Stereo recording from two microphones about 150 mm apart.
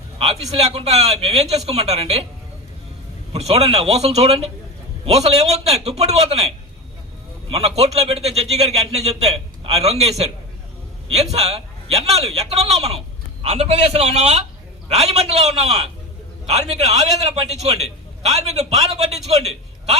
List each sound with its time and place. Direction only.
0.2 s a man's voice: 40° right (ahead or behind)
3.3 s a man's voice: 45° right (ahead or behind)
7.8 s a man's voice: 45° right (ahead or behind)
16.5 s a man's voice: 45° right (ahead or behind)